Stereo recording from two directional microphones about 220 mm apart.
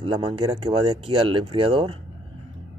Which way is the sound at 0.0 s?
25° right (ahead or behind).